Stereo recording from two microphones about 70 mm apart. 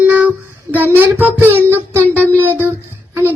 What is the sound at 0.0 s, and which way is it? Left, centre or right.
Child singing, centre.